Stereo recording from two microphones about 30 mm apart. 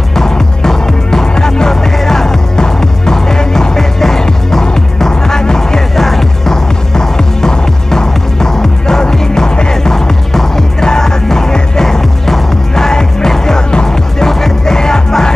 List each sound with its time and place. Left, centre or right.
0.1 s music: centre
5.9 s music: centre
11.8 s music: centre; by 13.8 s left
13.8 s music: centre